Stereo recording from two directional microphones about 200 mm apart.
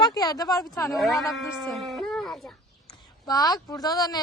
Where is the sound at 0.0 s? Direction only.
20° left (ahead or behind).